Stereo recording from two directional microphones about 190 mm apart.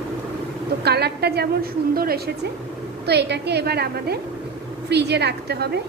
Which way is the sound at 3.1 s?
60° right (ahead or behind).